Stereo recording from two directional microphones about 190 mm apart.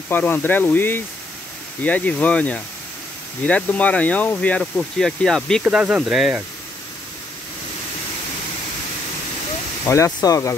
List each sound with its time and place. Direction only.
0.1 s speech: 10° left (ahead or behind)
9.8 s speech: 15° left (ahead or behind)